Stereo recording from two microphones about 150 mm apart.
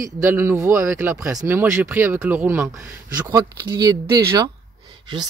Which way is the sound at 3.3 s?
25° right (ahead or behind).